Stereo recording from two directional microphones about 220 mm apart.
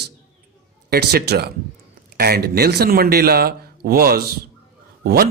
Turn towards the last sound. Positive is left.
turn(degrees=-45)  # may be behind; listen again after turning